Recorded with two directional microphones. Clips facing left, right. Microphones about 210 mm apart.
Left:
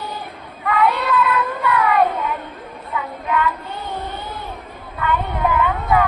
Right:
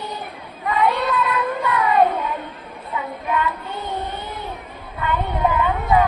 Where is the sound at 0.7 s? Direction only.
20° right (ahead or behind).